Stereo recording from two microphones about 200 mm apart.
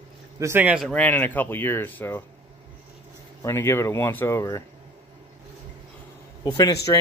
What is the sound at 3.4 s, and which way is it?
Speech, 15° left (ahead or behind).